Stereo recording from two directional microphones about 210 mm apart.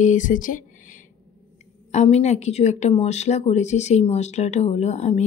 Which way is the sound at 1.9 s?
30° left (ahead or behind).